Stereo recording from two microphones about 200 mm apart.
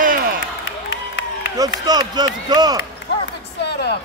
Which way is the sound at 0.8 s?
65° left (ahead or behind).